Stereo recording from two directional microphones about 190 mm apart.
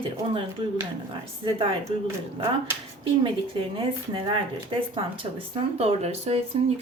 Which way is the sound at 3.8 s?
25° right (ahead or behind).